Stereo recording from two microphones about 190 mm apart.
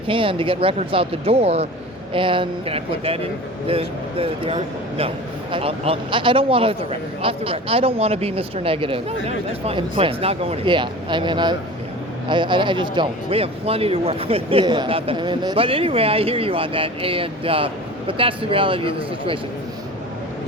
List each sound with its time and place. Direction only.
0.1 s speech: 30° right (ahead or behind)